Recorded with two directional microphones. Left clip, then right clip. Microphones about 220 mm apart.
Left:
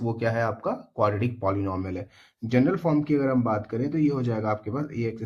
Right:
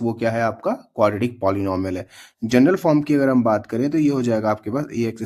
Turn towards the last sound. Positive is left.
turn(degrees=-45)  # may be behind; listen again after turning